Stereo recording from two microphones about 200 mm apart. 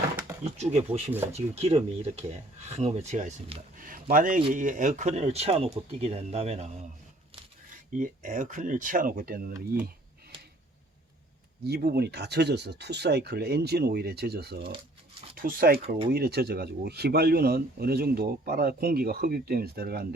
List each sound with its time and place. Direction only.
0.5 s speech: 35° right (ahead or behind)
7.7 s speech: 40° right (ahead or behind)
11.6 s speech: 55° right (ahead or behind)